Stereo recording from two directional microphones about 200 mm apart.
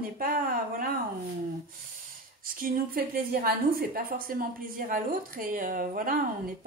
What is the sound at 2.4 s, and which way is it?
A woman's voice, 45° right (ahead or behind).